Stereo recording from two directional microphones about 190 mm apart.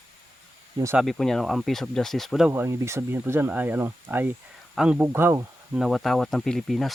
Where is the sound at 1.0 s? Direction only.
Centre (ahead or behind).